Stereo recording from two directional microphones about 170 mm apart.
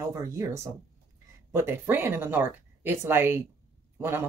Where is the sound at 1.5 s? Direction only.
15° right (ahead or behind).